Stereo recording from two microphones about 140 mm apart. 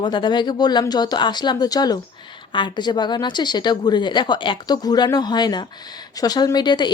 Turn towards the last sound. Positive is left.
turn(degrees=30)  # may be behind; listen again after turning